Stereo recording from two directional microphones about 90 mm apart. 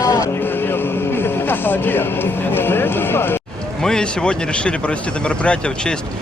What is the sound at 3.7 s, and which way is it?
A man's voice, 5° left (ahead or behind).